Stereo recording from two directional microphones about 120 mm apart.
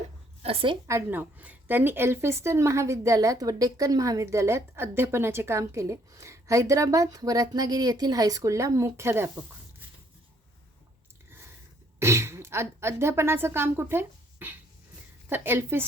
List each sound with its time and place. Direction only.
0.4 s a woman's voice: 50° right (ahead or behind)
0.9 s a woman's voice: 20° right (ahead or behind)
11.9 s a woman's voice: 20° right (ahead or behind)